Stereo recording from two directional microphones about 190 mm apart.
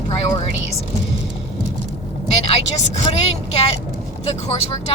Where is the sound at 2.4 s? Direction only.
35° left (ahead or behind).